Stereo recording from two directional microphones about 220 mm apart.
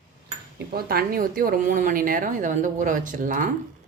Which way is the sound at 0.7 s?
45° right (ahead or behind).